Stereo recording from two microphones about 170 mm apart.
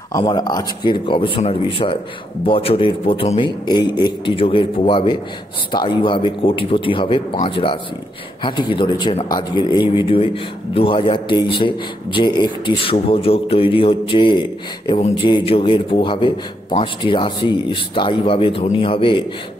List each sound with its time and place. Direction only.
0.1 s a man's voice: 25° left (ahead or behind)